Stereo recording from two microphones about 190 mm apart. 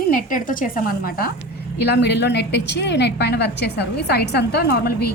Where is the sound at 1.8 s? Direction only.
60° left (ahead or behind).